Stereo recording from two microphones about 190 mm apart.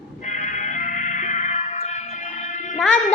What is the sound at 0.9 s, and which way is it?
Music, 40° left (ahead or behind).